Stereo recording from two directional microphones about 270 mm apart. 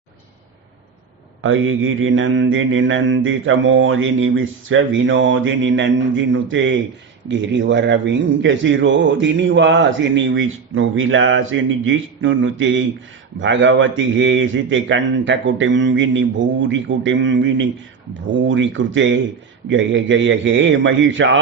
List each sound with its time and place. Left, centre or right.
1.4 s a man's voice: right